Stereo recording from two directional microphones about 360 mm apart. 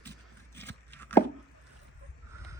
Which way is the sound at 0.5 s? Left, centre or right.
Centre.